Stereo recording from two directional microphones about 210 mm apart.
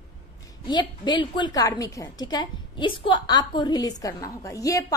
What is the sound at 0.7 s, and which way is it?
A woman's voice, 20° left (ahead or behind).